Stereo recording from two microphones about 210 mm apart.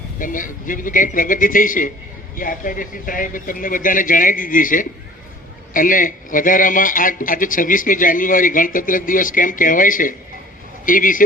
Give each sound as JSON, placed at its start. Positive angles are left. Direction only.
{"t": 0.2, "sound": "a man's voice", "side_deg": 40}